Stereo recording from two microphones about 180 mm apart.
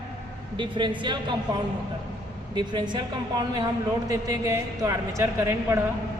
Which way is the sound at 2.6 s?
25° right (ahead or behind).